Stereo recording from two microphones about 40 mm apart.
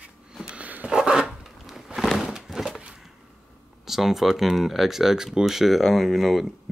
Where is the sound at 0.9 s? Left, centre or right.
Centre.